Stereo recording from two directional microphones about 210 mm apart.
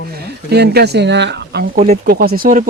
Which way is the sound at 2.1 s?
45° right (ahead or behind).